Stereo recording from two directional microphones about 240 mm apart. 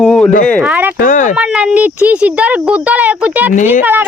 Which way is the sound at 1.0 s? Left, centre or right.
Left.